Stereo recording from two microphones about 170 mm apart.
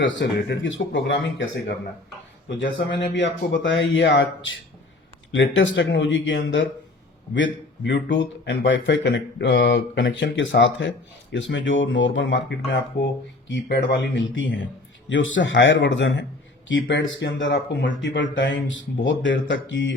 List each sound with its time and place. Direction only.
0.0 s speech: 90° left
3.2 s speech: 90° left
5.5 s speech: 90° left
13.5 s speech: 75° left (ahead or behind)